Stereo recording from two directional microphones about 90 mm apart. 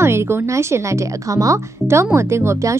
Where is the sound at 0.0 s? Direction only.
30° right (ahead or behind).